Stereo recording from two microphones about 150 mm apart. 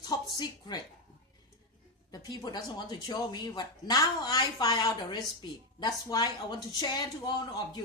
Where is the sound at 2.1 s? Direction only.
25° left (ahead or behind).